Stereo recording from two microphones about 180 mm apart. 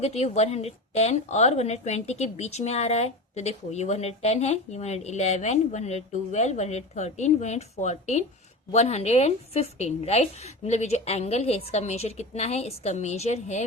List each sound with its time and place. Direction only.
0.0 s a woman's voice: 35° left (ahead or behind)